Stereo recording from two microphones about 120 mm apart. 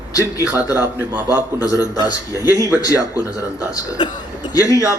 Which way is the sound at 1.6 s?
30° left (ahead or behind).